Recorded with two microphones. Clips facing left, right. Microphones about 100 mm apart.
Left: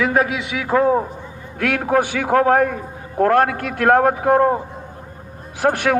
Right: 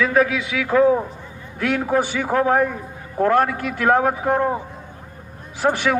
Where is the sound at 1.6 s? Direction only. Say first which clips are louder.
Left 2 dB; 55° left (ahead or behind).